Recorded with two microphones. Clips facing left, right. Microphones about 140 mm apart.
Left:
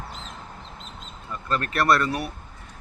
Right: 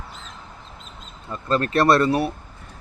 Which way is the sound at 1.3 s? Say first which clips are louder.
Right 6 dB; 30° right (ahead or behind).